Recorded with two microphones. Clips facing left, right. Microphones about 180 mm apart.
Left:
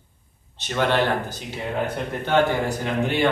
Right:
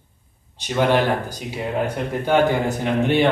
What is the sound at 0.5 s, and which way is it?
Speech, 15° right (ahead or behind).